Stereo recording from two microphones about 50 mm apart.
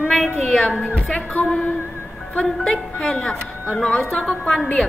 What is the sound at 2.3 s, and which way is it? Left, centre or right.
A woman's voice, left.